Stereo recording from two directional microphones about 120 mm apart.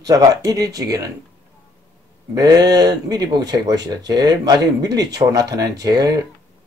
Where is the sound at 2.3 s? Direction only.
30° right (ahead or behind).